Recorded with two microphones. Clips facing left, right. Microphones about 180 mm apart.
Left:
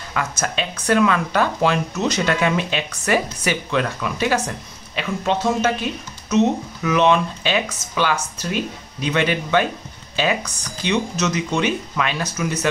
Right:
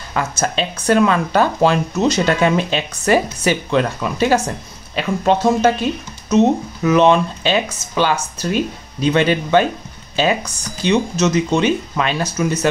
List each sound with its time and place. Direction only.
0.1 s speech: 30° right (ahead or behind)